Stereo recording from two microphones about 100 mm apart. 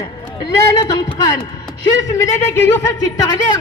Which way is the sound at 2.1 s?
30° left (ahead or behind).